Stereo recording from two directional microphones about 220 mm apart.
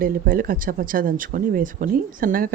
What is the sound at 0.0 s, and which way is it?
A woman's voice, 40° right (ahead or behind).